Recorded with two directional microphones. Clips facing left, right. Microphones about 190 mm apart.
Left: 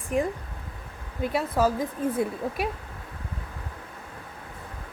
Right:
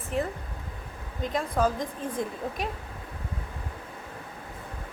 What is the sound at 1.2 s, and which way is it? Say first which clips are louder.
Speech: left 2 dB; 10° left (ahead or behind).